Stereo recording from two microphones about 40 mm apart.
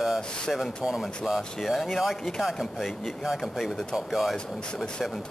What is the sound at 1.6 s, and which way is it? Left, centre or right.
Speech, centre.